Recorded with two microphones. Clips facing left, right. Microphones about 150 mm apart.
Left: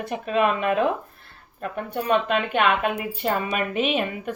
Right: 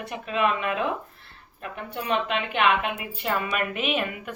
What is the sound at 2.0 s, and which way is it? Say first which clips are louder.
A woman's voice: left 4 dB; 45° left (ahead or behind).